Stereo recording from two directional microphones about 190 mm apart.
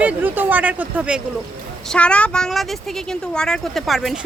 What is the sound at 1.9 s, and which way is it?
Speech, 5° left (ahead or behind).